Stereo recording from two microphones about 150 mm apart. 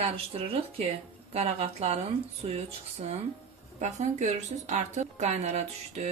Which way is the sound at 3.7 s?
50° right (ahead or behind).